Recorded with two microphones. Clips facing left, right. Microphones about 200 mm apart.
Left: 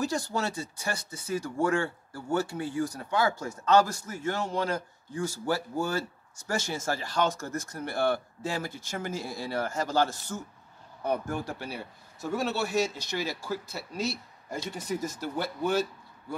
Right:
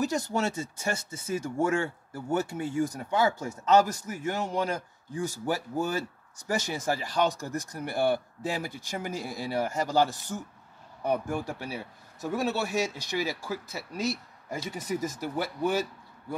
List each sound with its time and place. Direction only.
0.0 s a man's voice: 20° right (ahead or behind)
14.5 s speech: 5° right (ahead or behind)